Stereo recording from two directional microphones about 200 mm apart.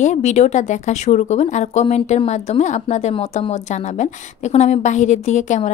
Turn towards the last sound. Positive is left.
turn(degrees=35)  # may be behind; listen again after turning